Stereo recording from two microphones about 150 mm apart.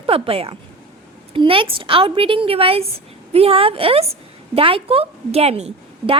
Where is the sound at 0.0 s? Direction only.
40° right (ahead or behind).